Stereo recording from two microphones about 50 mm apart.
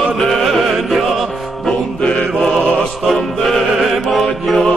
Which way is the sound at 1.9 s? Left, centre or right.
Centre.